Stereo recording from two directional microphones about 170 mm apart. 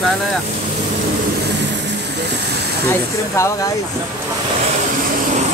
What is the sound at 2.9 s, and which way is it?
Speech, 15° left (ahead or behind).